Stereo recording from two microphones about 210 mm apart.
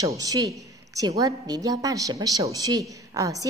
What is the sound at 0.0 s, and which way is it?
A woman's voice, 15° right (ahead or behind).